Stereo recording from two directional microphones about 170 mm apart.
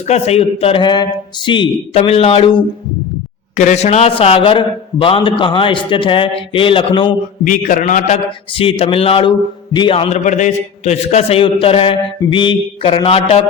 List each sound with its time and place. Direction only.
0.1 s a man's voice: 35° left (ahead or behind)
3.5 s a man's voice: 45° left (ahead or behind)
7.4 s a man's voice: 50° left (ahead or behind); by 13.4 s 35° left (ahead or behind)